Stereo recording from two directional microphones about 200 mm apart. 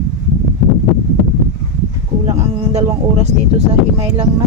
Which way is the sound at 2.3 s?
35° right (ahead or behind).